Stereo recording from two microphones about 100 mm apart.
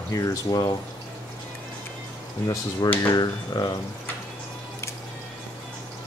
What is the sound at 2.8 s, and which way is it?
Speech, 40° left (ahead or behind).